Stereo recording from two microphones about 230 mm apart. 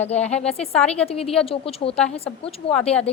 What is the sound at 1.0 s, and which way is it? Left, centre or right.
A woman's voice, left.